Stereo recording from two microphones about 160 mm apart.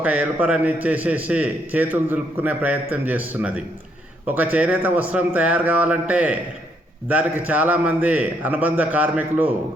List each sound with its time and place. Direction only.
0.0 s a man's voice: 10° right (ahead or behind)
7.4 s a man's voice: 10° right (ahead or behind)